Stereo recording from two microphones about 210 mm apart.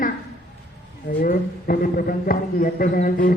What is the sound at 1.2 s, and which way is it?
Speech, 40° left (ahead or behind).